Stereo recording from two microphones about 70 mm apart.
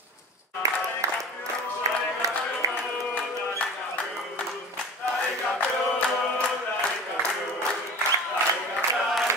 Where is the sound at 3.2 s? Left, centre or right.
Left.